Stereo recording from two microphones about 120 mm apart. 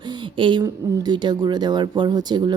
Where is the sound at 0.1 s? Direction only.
40° right (ahead or behind).